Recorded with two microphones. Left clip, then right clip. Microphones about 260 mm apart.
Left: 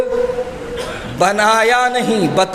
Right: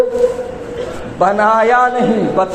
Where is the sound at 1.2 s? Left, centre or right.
Left.